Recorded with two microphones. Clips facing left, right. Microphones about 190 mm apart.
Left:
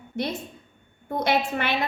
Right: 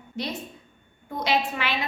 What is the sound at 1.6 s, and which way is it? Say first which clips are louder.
Speech: left 2 dB; 50° left (ahead or behind).